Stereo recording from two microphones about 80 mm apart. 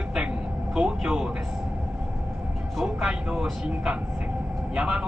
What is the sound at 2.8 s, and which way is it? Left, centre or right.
A woman's voice, centre.